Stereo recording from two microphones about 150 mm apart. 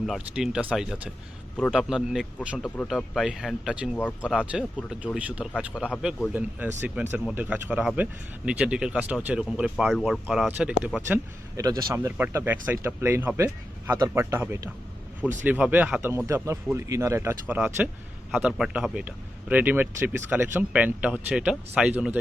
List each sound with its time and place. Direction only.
0.0 s speech: centre (ahead or behind)
1.5 s speech: 5° left (ahead or behind)
5.5 s speech: 5° left (ahead or behind); by 11.2 s 10° right (ahead or behind)
11.5 s speech: 25° right (ahead or behind)
12.1 s speech: 15° right (ahead or behind)